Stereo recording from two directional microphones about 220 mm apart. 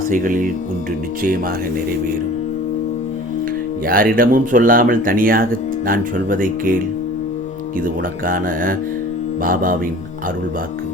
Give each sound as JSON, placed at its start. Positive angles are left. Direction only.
{"t": 0.1, "sound": "speech", "side_deg": -40}
{"t": 3.8, "sound": "speech", "side_deg": -40}
{"t": 7.9, "sound": "speech", "side_deg": -40}